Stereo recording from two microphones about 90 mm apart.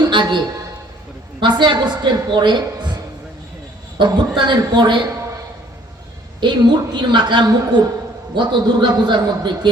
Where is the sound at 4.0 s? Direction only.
60° right (ahead or behind).